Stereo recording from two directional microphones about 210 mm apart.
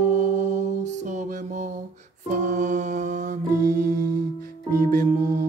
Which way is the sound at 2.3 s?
35° right (ahead or behind).